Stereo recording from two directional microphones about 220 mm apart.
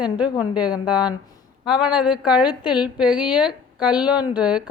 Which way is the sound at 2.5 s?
20° left (ahead or behind).